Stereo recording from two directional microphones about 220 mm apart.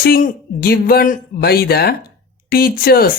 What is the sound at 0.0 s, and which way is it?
Speech, 45° left (ahead or behind).